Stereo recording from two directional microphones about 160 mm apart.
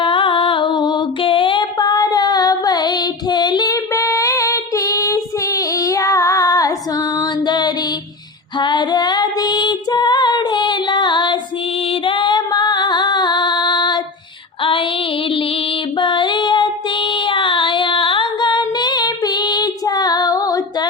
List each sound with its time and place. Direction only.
0.0 s music: 30° left (ahead or behind)
8.5 s female singing: 30° left (ahead or behind)
16.0 s child singing: 30° left (ahead or behind)